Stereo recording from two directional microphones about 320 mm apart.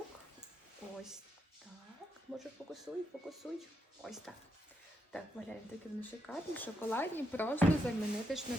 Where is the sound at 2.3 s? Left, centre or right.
Centre.